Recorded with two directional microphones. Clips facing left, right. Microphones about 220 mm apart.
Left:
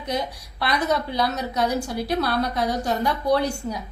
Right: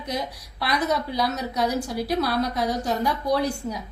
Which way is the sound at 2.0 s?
60° left (ahead or behind).